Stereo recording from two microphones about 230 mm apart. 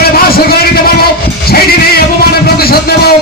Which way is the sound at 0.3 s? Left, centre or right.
Left.